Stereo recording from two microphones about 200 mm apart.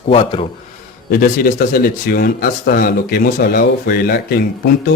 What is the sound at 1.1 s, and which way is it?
Speech, 45° left (ahead or behind).